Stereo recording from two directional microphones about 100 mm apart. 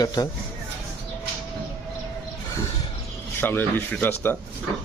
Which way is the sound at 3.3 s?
20° left (ahead or behind).